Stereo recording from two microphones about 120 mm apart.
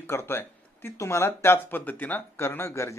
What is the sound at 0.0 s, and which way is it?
A man's voice, 20° left (ahead or behind).